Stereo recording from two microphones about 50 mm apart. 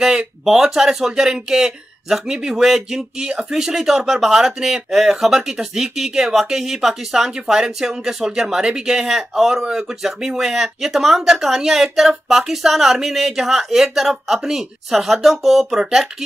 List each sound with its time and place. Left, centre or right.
0.5 s speech: centre